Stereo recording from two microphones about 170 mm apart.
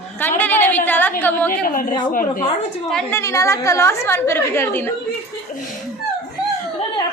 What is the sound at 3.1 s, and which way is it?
A woman's voice, 15° left (ahead or behind).